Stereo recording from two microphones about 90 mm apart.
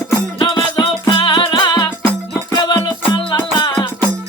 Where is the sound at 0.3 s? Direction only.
65° left (ahead or behind).